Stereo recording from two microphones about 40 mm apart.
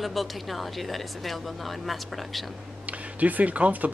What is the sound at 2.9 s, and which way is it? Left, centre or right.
Speech, right.